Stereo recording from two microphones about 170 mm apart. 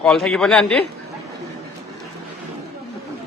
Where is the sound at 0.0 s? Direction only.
5° left (ahead or behind).